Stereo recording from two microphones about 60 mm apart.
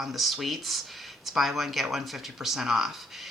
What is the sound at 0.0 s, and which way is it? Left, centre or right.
Speech, centre.